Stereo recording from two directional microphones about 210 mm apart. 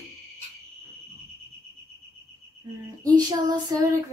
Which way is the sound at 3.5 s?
15° right (ahead or behind).